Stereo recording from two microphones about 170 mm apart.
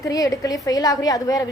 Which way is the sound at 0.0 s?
20° left (ahead or behind).